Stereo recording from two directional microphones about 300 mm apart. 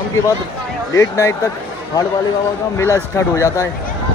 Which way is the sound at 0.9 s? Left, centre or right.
Centre.